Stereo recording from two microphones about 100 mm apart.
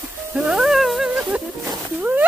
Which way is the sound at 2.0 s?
15° right (ahead or behind).